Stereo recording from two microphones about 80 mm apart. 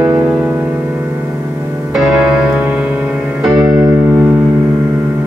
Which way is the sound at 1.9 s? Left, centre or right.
Centre.